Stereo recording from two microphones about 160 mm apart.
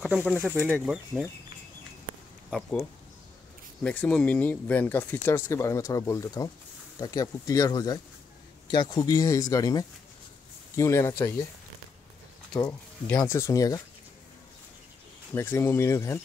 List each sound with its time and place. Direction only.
0.0 s speech: centre (ahead or behind)
0.5 s speech: 15° right (ahead or behind)
3.8 s speech: 10° left (ahead or behind)
13.2 s speech: 20° left (ahead or behind)
15.3 s speech: 15° left (ahead or behind)